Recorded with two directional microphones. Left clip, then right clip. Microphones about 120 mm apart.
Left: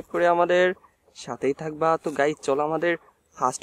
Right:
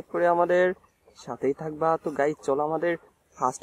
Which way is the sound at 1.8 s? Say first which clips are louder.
Left 3 dB; 20° left (ahead or behind).